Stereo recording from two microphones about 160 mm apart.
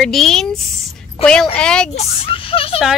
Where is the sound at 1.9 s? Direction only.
35° left (ahead or behind).